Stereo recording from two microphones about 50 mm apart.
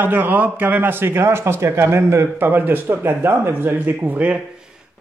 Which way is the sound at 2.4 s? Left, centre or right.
Right.